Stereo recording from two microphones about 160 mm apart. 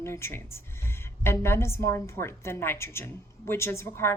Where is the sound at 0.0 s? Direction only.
15° left (ahead or behind).